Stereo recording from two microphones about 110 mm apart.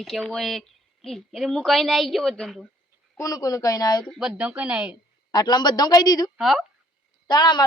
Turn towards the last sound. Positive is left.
turn(degrees=40)  # may be behind; listen again after turning